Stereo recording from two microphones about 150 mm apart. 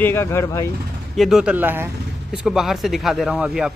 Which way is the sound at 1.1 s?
Centre (ahead or behind).